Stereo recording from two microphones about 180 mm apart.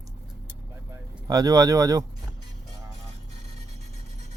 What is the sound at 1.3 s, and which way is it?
Speech, 20° right (ahead or behind).